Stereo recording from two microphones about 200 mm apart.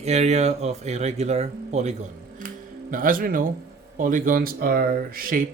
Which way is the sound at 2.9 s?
45° right (ahead or behind).